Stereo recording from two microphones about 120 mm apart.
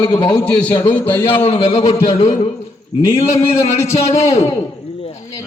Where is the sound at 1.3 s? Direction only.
55° left (ahead or behind).